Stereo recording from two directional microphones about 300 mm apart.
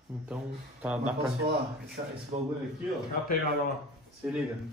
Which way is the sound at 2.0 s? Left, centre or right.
Right.